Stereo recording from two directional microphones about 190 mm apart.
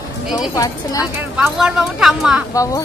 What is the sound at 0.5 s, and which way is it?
Speech, 20° left (ahead or behind).